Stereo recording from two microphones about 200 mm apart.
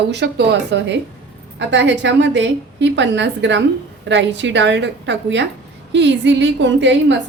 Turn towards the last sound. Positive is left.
turn(degrees=-65)  # may be behind; listen again after turning